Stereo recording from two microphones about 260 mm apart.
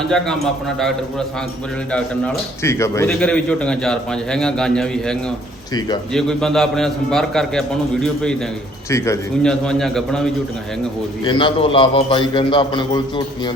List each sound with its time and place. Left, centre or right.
1.9 s a man's voice: centre
6.1 s a man's voice: centre
11.3 s a man's voice: centre